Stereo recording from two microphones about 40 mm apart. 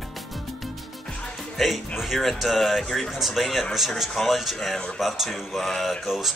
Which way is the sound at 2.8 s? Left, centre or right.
Centre.